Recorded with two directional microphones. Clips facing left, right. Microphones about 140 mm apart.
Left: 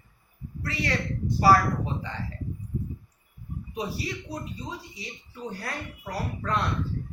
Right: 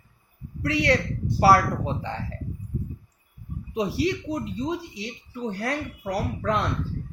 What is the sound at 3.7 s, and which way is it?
Speech, 90° right.